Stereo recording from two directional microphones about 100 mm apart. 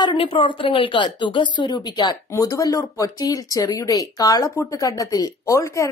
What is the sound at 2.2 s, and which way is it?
Speech, 30° left (ahead or behind).